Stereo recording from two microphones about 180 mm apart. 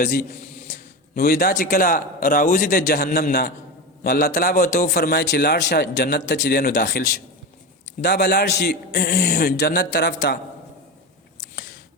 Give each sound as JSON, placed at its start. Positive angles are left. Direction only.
{"t": 0.0, "sound": "a man's voice", "side_deg": 55}
{"t": 8.0, "sound": "a man's voice", "side_deg": 65}